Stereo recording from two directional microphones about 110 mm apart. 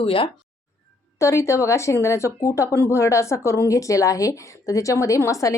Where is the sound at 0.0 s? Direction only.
55° left (ahead or behind).